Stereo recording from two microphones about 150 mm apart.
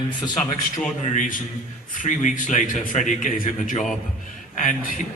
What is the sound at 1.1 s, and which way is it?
A man's voice, 65° left (ahead or behind).